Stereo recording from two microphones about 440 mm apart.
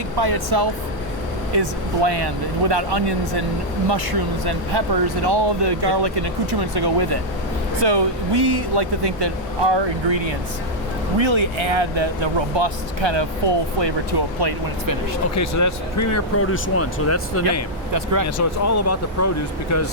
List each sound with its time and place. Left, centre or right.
0.2 s speech: right
1.5 s speech: right
7.8 s speech: right
15.4 s speech: left
17.9 s speech: right
18.3 s speech: left